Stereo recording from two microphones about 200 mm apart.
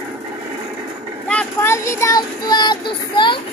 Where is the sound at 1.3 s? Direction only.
10° left (ahead or behind).